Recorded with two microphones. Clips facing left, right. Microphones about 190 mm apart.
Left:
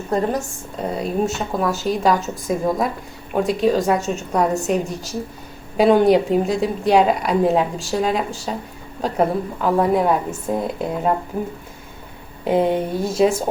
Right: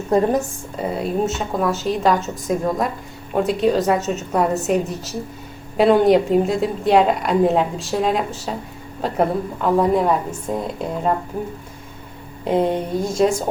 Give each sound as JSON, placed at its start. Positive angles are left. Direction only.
{"t": 0.1, "sound": "a woman's voice", "side_deg": -15}
{"t": 0.8, "sound": "speech", "side_deg": 0}
{"t": 12.5, "sound": "speech", "side_deg": 5}